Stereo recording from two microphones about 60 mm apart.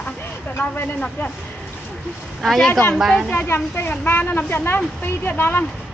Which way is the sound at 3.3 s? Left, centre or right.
Left.